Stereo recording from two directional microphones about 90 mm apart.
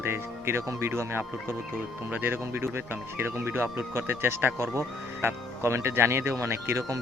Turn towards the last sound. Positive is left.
turn(degrees=-30)  # may be behind; listen again after turning